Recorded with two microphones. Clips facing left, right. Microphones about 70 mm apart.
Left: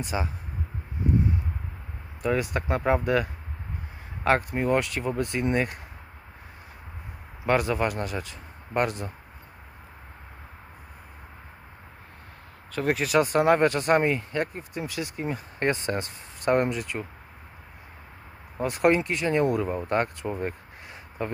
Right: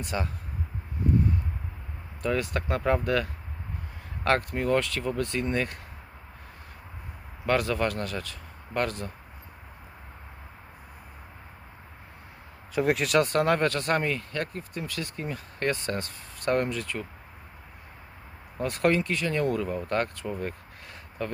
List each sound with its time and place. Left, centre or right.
0.0 s speech: centre
2.2 s speech: centre
4.5 s speech: centre
7.4 s speech: centre
12.7 s speech: centre
18.5 s speech: centre